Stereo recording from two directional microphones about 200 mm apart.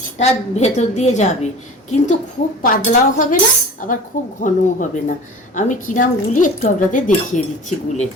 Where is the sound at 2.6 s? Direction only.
40° left (ahead or behind).